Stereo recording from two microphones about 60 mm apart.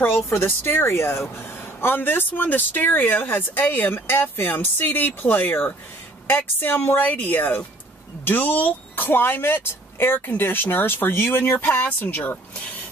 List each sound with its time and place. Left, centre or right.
0.0 s speech: left